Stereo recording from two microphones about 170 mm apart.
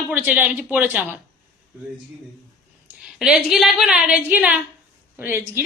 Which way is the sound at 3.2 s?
5° right (ahead or behind).